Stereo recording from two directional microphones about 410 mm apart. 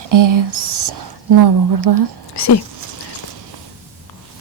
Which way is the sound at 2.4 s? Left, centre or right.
Left.